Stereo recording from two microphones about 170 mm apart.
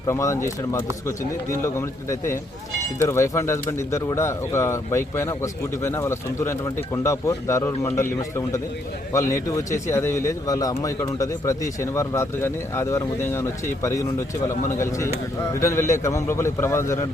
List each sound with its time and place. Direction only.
0.1 s speech: 15° left (ahead or behind)